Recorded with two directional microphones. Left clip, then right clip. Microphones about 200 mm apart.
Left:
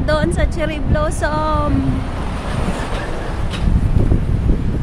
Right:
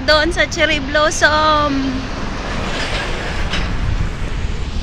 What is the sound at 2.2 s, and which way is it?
Vehicle, 40° left (ahead or behind).